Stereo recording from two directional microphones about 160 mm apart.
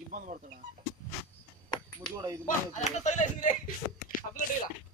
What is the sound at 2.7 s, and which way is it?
Speech, 45° left (ahead or behind).